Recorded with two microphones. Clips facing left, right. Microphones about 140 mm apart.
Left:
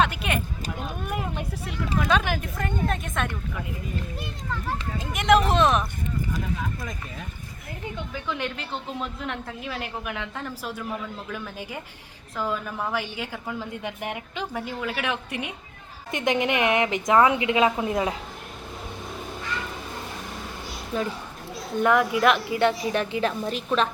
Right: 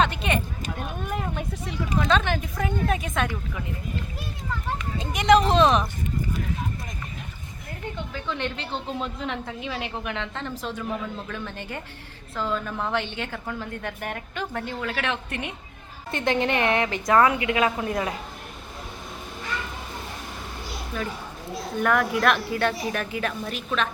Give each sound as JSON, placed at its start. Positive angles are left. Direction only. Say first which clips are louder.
{"t": 0.0, "sound": "a woman's voice", "louder": "right 1 dB", "side_deg": 5}
{"t": 0.8, "sound": "a sound", "louder": "even", "side_deg": 10}
{"t": 2.0, "sound": "a woman's voice", "louder": "right 1 dB", "side_deg": 5}
{"t": 4.9, "sound": "a woman's voice", "louder": "right 2 dB", "side_deg": 0}
{"t": 8.1, "sound": "a woman's voice", "louder": "even", "side_deg": 10}
{"t": 20.9, "sound": "speech", "louder": "left 4 dB", "side_deg": 30}
{"t": 21.8, "sound": "a woman's voice", "louder": "left 2 dB", "side_deg": 20}